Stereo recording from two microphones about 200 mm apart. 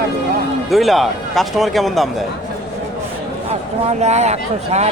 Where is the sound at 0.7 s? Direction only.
Centre (ahead or behind).